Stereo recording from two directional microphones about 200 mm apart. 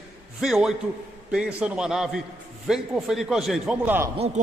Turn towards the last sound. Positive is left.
turn(degrees=-30)  # may be behind; listen again after turning